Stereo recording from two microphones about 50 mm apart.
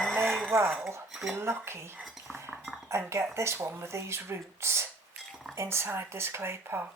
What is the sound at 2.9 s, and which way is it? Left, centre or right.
Speech, right.